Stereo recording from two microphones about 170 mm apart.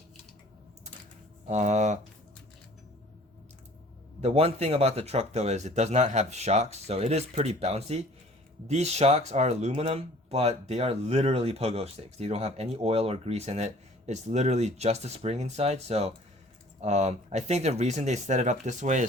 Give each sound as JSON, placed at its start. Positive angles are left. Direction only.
{"t": 1.5, "sound": "speech", "side_deg": -40}
{"t": 4.2, "sound": "speech", "side_deg": -35}